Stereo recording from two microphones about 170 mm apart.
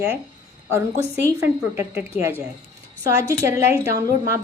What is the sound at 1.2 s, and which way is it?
Speech, 15° left (ahead or behind).